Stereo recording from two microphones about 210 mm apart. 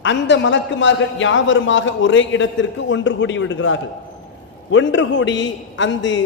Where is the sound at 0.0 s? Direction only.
60° left (ahead or behind).